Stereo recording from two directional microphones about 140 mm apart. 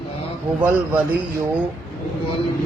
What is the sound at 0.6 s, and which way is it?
Speech, 10° right (ahead or behind).